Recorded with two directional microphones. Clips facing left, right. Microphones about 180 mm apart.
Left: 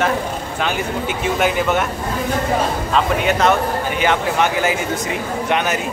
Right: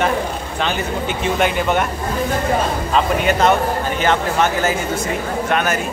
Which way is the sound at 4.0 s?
15° left (ahead or behind).